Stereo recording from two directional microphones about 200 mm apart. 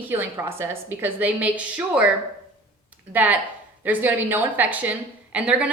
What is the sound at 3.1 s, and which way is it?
Speech, 10° right (ahead or behind).